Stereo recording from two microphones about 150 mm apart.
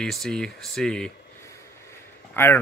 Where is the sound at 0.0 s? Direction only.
5° left (ahead or behind).